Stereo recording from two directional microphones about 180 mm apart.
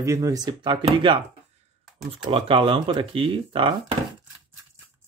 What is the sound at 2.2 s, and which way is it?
Speech, 30° right (ahead or behind).